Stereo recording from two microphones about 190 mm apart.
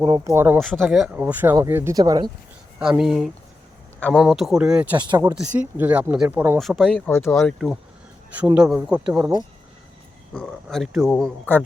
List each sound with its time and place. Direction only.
0.3 s speech: 10° right (ahead or behind)
0.6 s speech: centre (ahead or behind); by 2.3 s 20° right (ahead or behind)
2.7 s speech: 10° right (ahead or behind)
4.9 s speech: 20° right (ahead or behind)
5.3 s speech: 5° right (ahead or behind); by 7.5 s 15° left (ahead or behind)
8.4 s speech: 5° right (ahead or behind)
10.3 s speech: centre (ahead or behind)